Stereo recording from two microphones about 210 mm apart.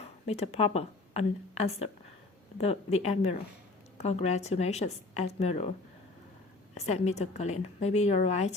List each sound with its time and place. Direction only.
0.0 s speech: 30° left (ahead or behind)
6.7 s speech: 30° left (ahead or behind)